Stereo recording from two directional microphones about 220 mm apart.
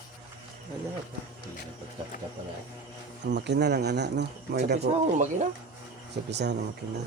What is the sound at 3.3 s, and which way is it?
Speech, 50° right (ahead or behind).